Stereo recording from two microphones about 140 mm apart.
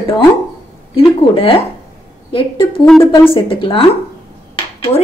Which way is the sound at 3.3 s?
40° left (ahead or behind).